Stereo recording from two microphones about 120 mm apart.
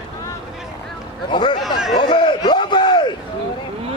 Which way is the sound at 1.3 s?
40° left (ahead or behind).